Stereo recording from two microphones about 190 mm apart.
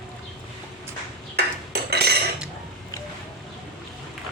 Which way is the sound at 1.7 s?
60° right (ahead or behind).